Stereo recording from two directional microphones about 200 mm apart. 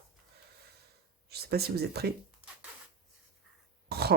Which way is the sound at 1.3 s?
50° right (ahead or behind).